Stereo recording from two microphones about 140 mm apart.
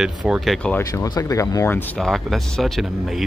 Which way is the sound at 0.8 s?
25° left (ahead or behind).